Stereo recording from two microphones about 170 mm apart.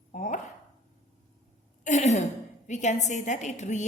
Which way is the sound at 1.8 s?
45° left (ahead or behind).